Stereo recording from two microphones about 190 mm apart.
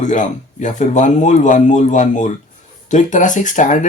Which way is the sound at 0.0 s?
40° left (ahead or behind).